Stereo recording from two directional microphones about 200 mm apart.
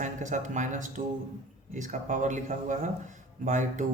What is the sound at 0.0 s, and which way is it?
A man's voice, 40° right (ahead or behind).